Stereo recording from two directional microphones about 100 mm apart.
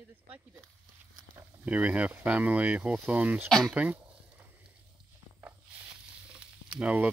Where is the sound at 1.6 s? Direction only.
15° right (ahead or behind).